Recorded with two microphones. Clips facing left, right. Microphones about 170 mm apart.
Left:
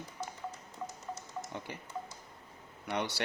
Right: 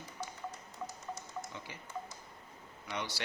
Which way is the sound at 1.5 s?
60° left (ahead or behind).